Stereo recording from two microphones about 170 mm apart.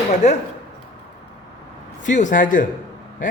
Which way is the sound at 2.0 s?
45° left (ahead or behind).